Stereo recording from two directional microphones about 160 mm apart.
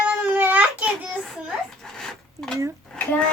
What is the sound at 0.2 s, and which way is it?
Child singing, 10° right (ahead or behind).